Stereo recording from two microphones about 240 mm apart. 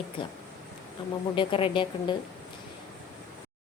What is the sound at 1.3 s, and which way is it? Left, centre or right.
Speech, left.